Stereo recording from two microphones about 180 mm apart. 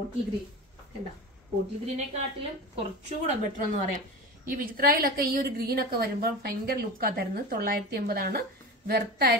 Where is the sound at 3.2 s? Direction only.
35° right (ahead or behind).